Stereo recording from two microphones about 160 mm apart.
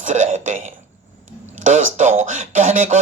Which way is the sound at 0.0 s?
50° right (ahead or behind).